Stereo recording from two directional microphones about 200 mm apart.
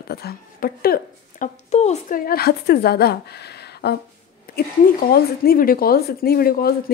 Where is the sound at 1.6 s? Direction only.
35° left (ahead or behind).